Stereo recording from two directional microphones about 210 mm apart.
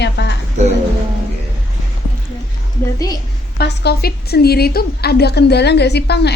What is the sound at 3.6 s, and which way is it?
A woman's voice, 50° left (ahead or behind).